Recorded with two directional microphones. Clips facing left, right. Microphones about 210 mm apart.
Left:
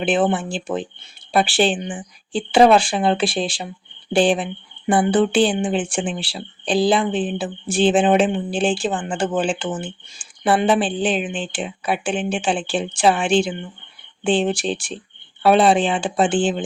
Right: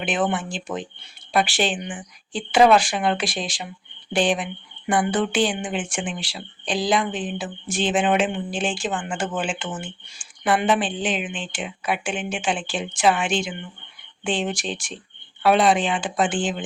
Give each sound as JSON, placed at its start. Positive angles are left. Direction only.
{"t": 0.0, "sound": "speech", "side_deg": 30}